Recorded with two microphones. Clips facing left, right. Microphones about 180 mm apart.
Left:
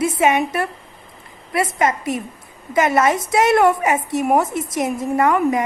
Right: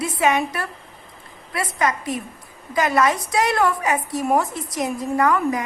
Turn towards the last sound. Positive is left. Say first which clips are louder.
# left 3 dB
turn(degrees=20)  # may be behind; listen again after turning